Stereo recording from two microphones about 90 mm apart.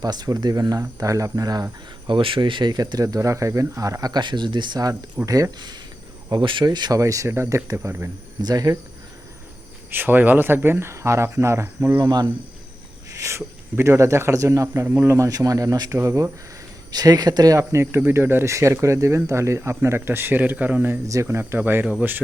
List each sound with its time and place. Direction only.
0.0 s speech: 50° right (ahead or behind)
2.0 s speech: 65° right (ahead or behind)
5.2 s speech: 40° right (ahead or behind)
6.3 s speech: 65° right (ahead or behind)
7.0 s speech: 35° right (ahead or behind)
8.4 s speech: 45° right (ahead or behind)
9.9 s speech: 20° right (ahead or behind)
11.9 s speech: 40° right (ahead or behind)
15.3 s speech: 40° right (ahead or behind)
16.9 s speech: 45° right (ahead or behind); by 21.8 s 25° right (ahead or behind)